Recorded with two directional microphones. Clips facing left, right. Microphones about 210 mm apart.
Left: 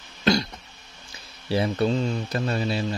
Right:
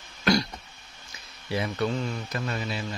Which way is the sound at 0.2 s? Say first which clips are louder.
Left 2 dB; 25° left (ahead or behind).